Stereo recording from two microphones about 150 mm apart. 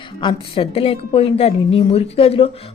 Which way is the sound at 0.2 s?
35° left (ahead or behind).